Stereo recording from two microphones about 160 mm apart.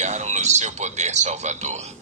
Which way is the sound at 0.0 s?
45° right (ahead or behind).